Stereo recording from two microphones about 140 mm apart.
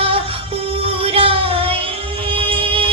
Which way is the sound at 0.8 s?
40° right (ahead or behind).